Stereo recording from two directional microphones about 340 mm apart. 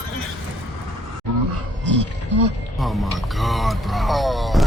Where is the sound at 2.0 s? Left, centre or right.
Right.